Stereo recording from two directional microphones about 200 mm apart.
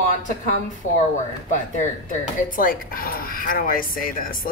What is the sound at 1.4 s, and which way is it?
A woman's voice, 40° left (ahead or behind).